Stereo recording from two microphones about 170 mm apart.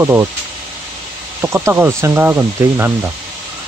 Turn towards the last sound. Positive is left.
turn(degrees=-15)  # may be behind; listen again after turning